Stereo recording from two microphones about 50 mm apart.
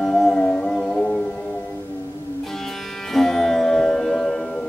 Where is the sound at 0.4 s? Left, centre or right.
Centre.